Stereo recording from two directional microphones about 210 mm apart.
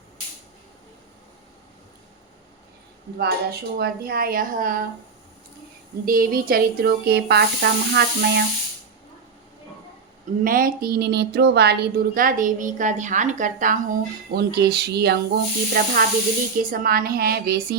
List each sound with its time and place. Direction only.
3.2 s speech: 50° right (ahead or behind)
6.1 s speech: 45° right (ahead or behind)
10.4 s a woman's voice: 40° right (ahead or behind)
14.3 s speech: 50° right (ahead or behind)